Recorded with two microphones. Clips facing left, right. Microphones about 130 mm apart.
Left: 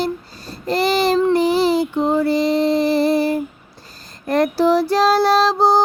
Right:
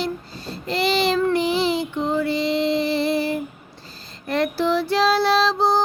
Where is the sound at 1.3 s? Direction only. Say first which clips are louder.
Left 5 dB; 40° left (ahead or behind).